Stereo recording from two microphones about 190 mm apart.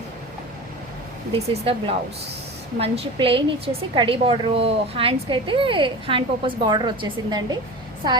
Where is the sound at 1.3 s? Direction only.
30° right (ahead or behind).